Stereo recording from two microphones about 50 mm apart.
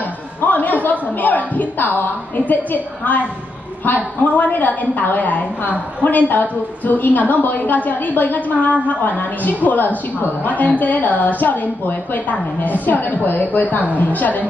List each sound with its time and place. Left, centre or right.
0.4 s a woman's voice: left